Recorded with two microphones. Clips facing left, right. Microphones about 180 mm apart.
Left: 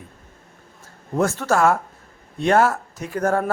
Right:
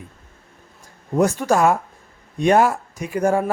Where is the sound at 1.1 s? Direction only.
15° right (ahead or behind).